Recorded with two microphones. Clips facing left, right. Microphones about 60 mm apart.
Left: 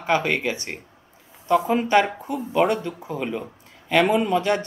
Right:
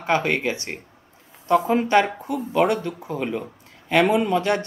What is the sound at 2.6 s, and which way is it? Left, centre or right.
Speech, left.